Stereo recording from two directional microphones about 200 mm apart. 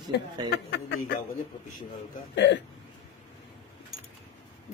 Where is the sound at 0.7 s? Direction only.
55° left (ahead or behind).